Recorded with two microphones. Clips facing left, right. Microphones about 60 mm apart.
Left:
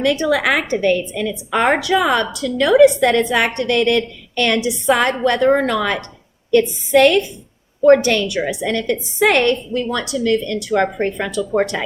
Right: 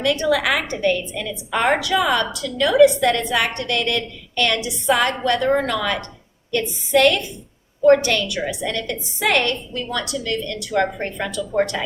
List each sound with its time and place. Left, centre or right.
0.0 s a woman's voice: left